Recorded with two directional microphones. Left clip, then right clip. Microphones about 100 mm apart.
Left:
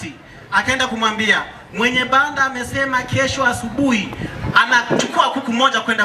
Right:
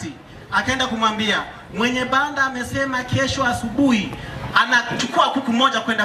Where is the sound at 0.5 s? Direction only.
15° left (ahead or behind).